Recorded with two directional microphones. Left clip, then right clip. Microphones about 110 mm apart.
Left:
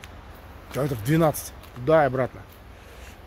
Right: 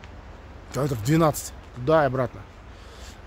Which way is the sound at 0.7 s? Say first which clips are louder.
Right 1 dB; 15° right (ahead or behind).